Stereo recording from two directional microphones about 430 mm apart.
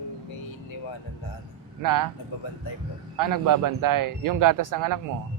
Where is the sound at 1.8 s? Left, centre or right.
Right.